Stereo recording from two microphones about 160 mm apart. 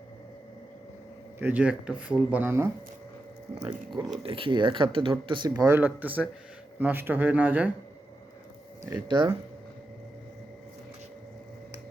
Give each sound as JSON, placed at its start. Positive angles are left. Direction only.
{"t": 1.4, "sound": "speech", "side_deg": -10}
{"t": 3.6, "sound": "speech", "side_deg": -30}
{"t": 5.6, "sound": "speech", "side_deg": -10}
{"t": 8.9, "sound": "speech", "side_deg": -30}